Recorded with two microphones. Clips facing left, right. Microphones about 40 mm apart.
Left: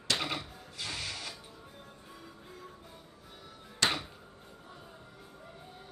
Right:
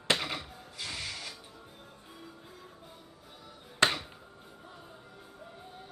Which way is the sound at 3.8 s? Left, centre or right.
Right.